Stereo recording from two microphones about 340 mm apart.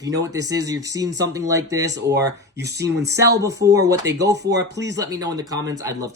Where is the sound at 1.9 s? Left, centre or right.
Right.